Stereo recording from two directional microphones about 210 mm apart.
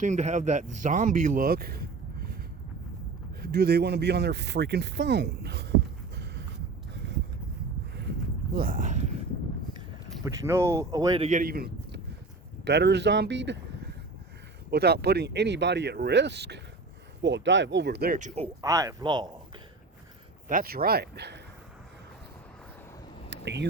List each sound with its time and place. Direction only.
0.0 s speech: 35° right (ahead or behind)
3.4 s speech: 50° right (ahead or behind)
8.5 s speech: 45° right (ahead or behind)
10.2 s speech: 15° right (ahead or behind)
11.3 s a man's voice: 40° right (ahead or behind)
18.6 s speech: 15° right (ahead or behind)
20.5 s speech: 45° right (ahead or behind)
23.3 s a sound: 55° right (ahead or behind)